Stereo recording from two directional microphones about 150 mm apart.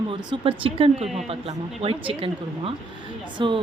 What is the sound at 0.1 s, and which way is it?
Speech, 35° right (ahead or behind).